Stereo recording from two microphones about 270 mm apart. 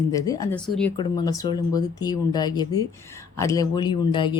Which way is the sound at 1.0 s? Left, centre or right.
Centre.